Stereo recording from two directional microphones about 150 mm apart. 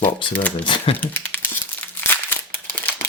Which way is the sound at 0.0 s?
35° left (ahead or behind).